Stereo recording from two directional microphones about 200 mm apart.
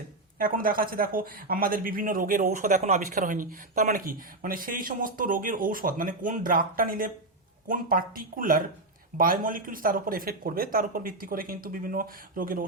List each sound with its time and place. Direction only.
0.3 s speech: 45° right (ahead or behind)